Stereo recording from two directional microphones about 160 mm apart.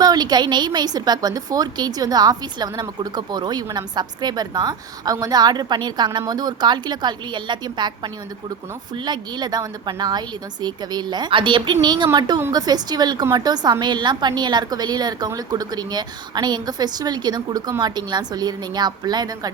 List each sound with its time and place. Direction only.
0.0 s a woman's voice: 25° right (ahead or behind)